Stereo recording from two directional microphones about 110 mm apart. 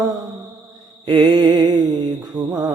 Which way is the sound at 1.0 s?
45° right (ahead or behind).